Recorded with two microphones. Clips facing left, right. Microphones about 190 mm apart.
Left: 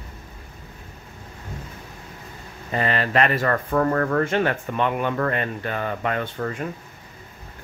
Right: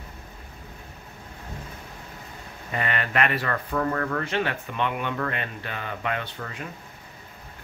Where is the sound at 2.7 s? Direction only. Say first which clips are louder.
Left 5 dB; 35° left (ahead or behind).